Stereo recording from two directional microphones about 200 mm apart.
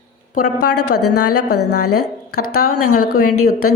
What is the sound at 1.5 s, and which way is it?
A woman's voice, 90° left.